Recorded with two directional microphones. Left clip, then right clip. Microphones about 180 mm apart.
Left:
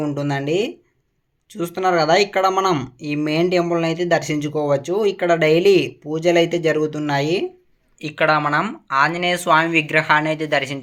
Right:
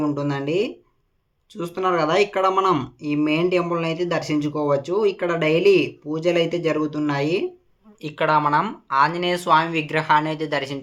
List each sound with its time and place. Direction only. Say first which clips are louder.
0.0 s speech: left 1 dB; 20° left (ahead or behind)